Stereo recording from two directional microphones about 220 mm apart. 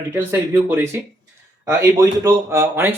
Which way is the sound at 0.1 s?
10° right (ahead or behind).